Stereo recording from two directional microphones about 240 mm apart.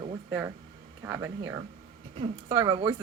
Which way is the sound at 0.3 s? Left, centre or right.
Centre.